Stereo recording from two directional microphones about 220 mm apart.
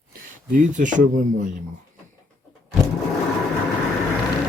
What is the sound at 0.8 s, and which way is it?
Speech, 35° right (ahead or behind).